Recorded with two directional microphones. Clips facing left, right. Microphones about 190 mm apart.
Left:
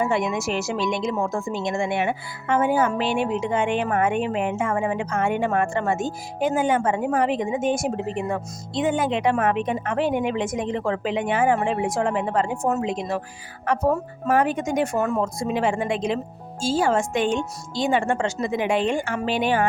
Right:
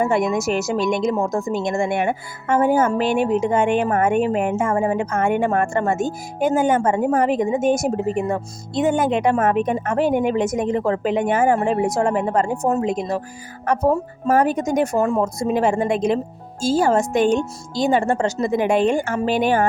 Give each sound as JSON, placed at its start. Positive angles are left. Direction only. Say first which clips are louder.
{"t": 0.0, "sound": "speech", "louder": "right 4 dB", "side_deg": -45}